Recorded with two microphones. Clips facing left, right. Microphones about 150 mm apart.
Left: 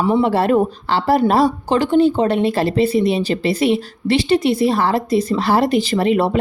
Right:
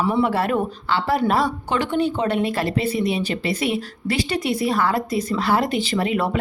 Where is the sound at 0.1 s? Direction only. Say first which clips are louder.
Left 5 dB; 30° left (ahead or behind).